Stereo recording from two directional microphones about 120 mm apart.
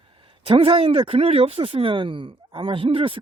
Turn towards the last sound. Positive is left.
turn(degrees=-45)  # may be behind; listen again after turning